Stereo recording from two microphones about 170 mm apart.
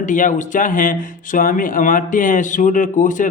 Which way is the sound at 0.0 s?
50° left (ahead or behind).